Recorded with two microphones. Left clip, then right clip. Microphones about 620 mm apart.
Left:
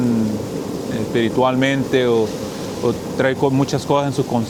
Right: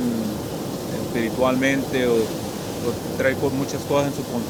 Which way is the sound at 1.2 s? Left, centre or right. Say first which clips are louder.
Left 4 dB; left.